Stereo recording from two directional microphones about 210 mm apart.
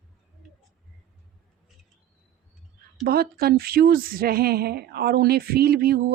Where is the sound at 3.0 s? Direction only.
45° right (ahead or behind).